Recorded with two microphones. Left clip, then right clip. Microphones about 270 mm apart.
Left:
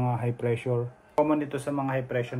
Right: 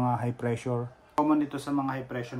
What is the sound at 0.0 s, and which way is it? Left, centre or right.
Speech, right.